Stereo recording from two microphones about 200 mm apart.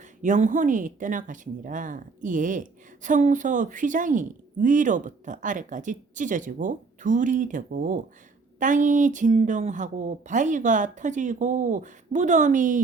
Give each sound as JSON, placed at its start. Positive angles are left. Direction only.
{"t": 0.2, "sound": "speech", "side_deg": -40}